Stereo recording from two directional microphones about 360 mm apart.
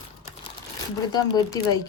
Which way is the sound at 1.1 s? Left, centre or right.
Centre.